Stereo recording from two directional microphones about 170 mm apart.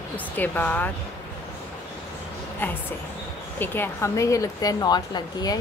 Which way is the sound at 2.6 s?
10° left (ahead or behind).